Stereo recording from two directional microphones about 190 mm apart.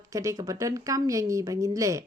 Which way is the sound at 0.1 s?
15° right (ahead or behind).